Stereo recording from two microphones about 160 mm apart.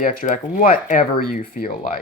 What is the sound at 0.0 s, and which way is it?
Speech, 60° left (ahead or behind).